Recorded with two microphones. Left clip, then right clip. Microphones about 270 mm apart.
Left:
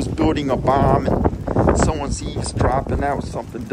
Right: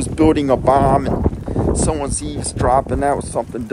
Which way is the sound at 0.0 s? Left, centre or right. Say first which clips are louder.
Right 5 dB; centre.